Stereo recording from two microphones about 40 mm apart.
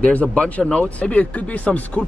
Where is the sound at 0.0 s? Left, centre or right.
Left.